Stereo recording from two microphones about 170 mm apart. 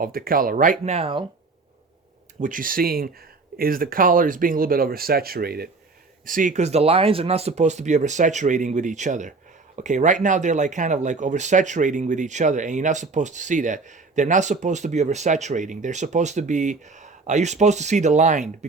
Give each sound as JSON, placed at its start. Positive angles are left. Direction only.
{"t": 0.0, "sound": "speech", "side_deg": -60}
{"t": 2.4, "sound": "speech", "side_deg": -50}
{"t": 6.2, "sound": "speech", "side_deg": -50}